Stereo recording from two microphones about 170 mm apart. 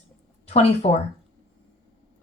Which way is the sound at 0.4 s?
35° left (ahead or behind).